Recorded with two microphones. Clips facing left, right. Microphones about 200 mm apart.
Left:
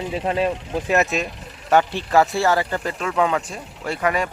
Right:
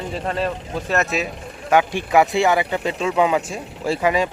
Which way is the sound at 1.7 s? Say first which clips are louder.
Right 1 dB; 10° right (ahead or behind).